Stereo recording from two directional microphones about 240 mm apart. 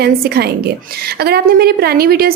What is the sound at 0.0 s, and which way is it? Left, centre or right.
A woman's voice, right.